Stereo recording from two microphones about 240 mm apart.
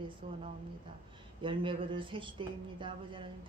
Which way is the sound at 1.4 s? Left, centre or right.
Right.